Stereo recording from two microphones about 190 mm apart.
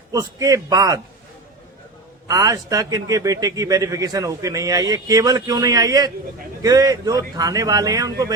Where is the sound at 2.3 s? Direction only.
20° right (ahead or behind).